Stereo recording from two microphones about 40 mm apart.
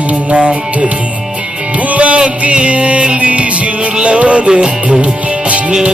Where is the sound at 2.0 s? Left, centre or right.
Right.